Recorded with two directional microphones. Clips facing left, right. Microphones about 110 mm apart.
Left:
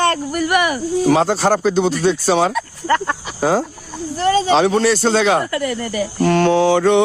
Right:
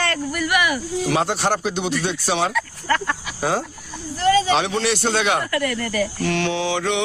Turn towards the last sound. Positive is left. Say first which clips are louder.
# left 9 dB
turn(degrees=40)  # may be behind; listen again after turning